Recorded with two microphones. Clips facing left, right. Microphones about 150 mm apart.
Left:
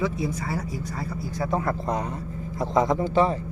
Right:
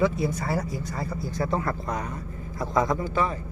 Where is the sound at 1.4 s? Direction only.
15° left (ahead or behind).